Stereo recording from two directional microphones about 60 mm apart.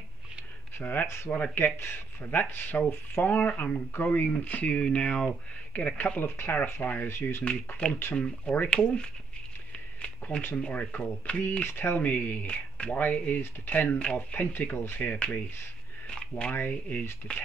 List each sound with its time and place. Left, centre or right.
1.0 s speech: left
1.3 s speech: left
7.1 s speech: left
8.1 s speech: left
10.0 s a sound: centre
10.5 s speech: left
11.6 s speech: left
16.1 s a sound: centre
16.5 s speech: left